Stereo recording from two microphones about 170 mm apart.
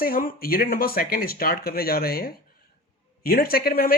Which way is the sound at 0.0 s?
55° left (ahead or behind).